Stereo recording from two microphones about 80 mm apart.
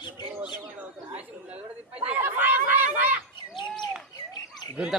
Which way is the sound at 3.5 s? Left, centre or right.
Left.